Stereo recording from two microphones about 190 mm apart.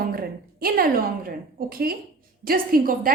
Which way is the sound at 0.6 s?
50° right (ahead or behind).